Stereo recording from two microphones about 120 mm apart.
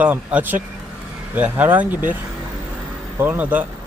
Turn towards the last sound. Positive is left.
turn(degrees=-15)  # may be behind; listen again after turning